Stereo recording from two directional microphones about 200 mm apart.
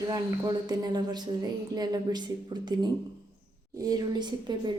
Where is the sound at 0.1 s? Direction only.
20° right (ahead or behind).